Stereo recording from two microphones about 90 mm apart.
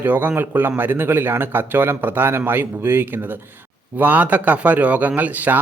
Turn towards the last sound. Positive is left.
turn(degrees=-20)  # may be behind; listen again after turning